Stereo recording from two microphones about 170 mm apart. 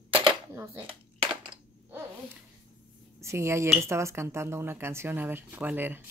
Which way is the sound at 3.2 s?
15° right (ahead or behind).